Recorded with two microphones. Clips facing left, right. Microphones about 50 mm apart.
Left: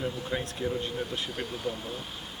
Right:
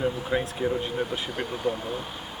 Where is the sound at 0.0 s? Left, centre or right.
Centre.